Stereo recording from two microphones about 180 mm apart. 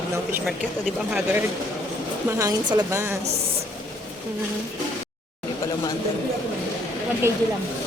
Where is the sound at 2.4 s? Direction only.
20° right (ahead or behind).